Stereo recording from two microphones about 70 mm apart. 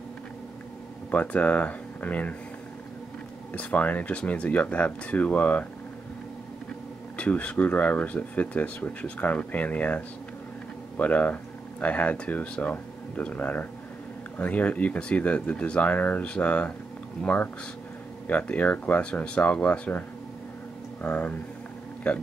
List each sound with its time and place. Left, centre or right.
1.1 s speech: centre
3.5 s speech: left
7.2 s speech: centre
21.0 s speech: left